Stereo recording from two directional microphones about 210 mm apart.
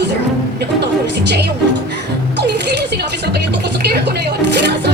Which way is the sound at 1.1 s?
55° right (ahead or behind).